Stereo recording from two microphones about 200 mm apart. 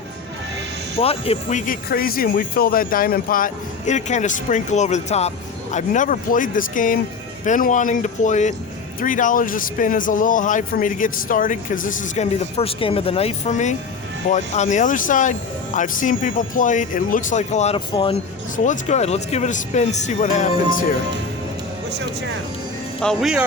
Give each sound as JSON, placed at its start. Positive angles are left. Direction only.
{"t": 0.9, "sound": "speech", "side_deg": 30}
{"t": 18.5, "sound": "speech", "side_deg": 40}
{"t": 23.0, "sound": "speech", "side_deg": 0}